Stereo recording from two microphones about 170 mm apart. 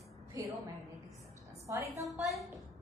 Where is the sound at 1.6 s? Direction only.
15° right (ahead or behind).